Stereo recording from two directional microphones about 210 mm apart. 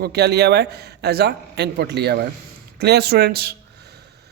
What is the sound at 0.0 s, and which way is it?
A woman's voice, 50° right (ahead or behind).